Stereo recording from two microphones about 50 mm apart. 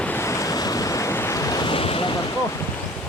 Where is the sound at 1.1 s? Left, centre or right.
Left.